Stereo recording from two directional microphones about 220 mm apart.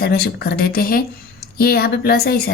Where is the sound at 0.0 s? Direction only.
45° left (ahead or behind).